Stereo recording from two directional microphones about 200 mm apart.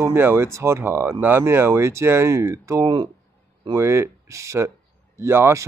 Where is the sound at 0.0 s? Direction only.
10° right (ahead or behind).